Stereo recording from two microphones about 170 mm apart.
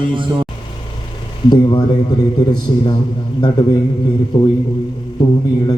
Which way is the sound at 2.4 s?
25° left (ahead or behind).